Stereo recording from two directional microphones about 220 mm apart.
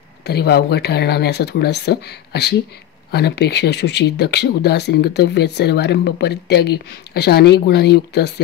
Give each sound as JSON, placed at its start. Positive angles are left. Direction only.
{"t": 0.3, "sound": "speech", "side_deg": 45}